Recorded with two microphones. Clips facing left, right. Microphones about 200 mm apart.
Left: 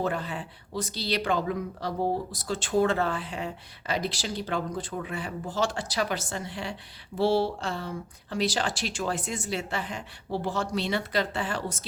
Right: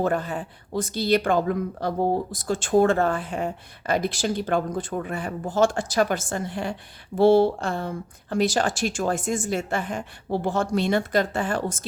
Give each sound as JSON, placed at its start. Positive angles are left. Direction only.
{"t": 0.0, "sound": "speech", "side_deg": -50}